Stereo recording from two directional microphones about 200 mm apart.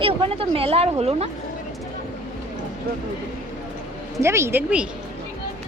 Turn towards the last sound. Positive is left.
turn(degrees=-10)  # may be behind; listen again after turning